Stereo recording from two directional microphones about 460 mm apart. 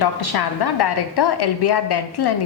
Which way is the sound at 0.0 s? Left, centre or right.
Left.